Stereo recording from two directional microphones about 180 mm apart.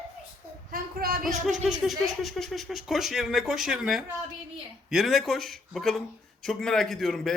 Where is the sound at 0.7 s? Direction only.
55° right (ahead or behind).